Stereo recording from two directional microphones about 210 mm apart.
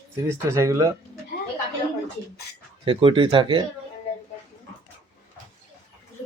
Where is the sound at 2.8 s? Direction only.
25° right (ahead or behind).